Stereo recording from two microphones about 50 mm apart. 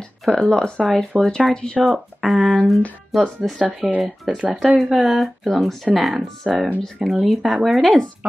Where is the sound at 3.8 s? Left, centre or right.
Centre.